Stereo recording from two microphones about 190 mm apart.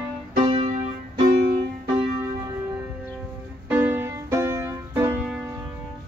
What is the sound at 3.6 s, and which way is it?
Music, 10° right (ahead or behind).